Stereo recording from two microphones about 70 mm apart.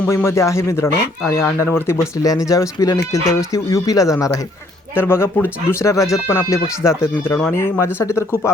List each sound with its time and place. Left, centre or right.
0.1 s speech: left
2.2 s speech: left
4.9 s speech: left